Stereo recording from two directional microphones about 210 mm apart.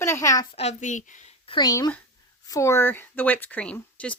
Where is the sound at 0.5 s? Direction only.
35° left (ahead or behind).